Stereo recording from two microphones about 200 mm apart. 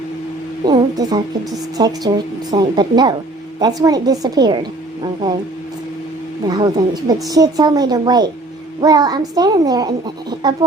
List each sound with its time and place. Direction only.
0.6 s a woman's voice: 20° right (ahead or behind)
6.5 s a woman's voice: 20° right (ahead or behind)